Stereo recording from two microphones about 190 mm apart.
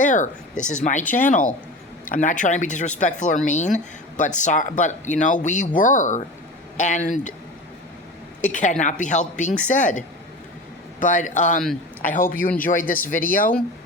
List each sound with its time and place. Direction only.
0.0 s speech: 40° left (ahead or behind)
1.0 s speech: 10° left (ahead or behind)
1.3 s speech: 40° left (ahead or behind)
8.5 s speech: 40° left (ahead or behind)
11.0 s speech: 40° left (ahead or behind)